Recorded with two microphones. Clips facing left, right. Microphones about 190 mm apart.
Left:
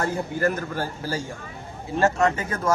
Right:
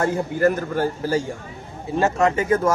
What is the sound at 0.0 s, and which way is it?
Speech, 45° right (ahead or behind).